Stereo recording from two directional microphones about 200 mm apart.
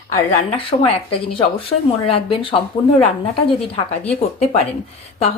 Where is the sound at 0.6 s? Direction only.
25° left (ahead or behind).